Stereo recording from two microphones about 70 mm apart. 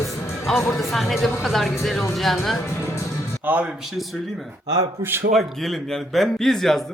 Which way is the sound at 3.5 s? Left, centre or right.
Right.